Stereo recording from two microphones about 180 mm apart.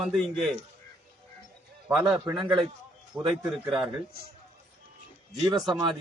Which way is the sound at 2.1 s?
15° right (ahead or behind).